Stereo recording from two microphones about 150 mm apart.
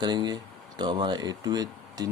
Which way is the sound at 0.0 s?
30° right (ahead or behind).